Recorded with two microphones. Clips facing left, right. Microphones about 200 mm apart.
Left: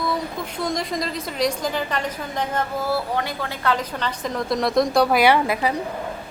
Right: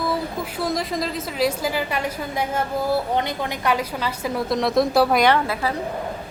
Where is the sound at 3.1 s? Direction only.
20° right (ahead or behind); by 5.2 s 5° right (ahead or behind).